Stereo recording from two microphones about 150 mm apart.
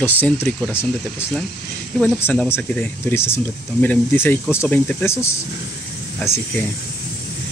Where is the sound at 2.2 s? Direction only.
10° left (ahead or behind).